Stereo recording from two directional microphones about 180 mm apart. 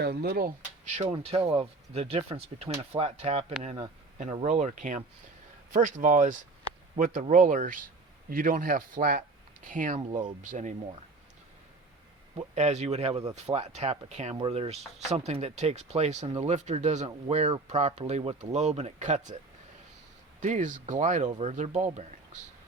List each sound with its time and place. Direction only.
0.0 s speech: 65° right (ahead or behind)
0.9 s speech: 35° right (ahead or behind)
12.5 s speech: 40° right (ahead or behind)
20.4 s speech: 45° right (ahead or behind)